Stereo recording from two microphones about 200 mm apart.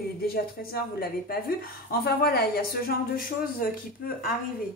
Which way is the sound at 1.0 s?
50° left (ahead or behind).